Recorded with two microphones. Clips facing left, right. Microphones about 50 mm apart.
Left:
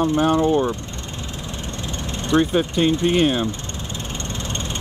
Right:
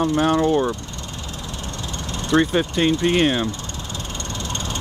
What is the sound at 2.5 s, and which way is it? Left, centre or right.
Speech, centre.